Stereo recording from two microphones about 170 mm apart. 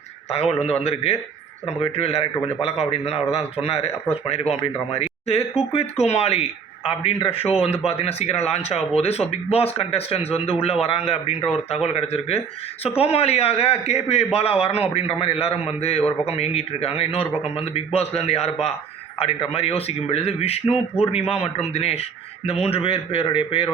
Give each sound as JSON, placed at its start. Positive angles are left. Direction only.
{"t": 0.3, "sound": "a man's voice", "side_deg": 35}